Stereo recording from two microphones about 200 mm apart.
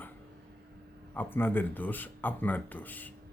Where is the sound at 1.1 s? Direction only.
10° left (ahead or behind).